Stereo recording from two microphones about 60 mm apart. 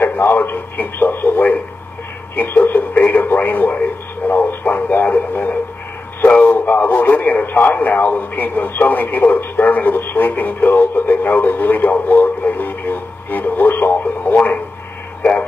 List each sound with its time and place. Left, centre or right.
0.0 s radio: left